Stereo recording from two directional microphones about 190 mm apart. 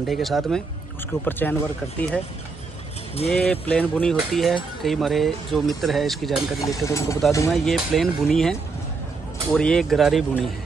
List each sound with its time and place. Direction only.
0.0 s speech: centre (ahead or behind)
3.3 s speech: 5° left (ahead or behind)
6.6 s speech: 15° left (ahead or behind)
7.5 s speech: centre (ahead or behind)